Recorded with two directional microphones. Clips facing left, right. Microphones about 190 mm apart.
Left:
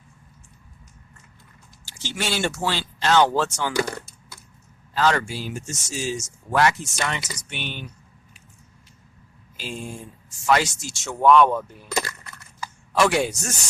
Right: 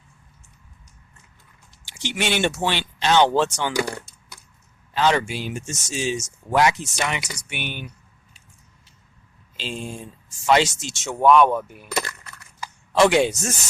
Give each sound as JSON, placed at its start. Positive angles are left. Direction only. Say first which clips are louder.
{"t": 2.0, "sound": "speech", "louder": "right 3 dB", "side_deg": -15}
{"t": 4.9, "sound": "speech", "louder": "right 1 dB", "side_deg": -20}
{"t": 9.6, "sound": "speech", "louder": "right 2 dB", "side_deg": -25}
{"t": 12.5, "sound": "a sound", "louder": "right 3 dB", "side_deg": -20}